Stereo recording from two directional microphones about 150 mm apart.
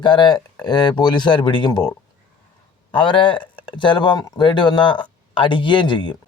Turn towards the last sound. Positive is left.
turn(degrees=30)  # may be behind; listen again after turning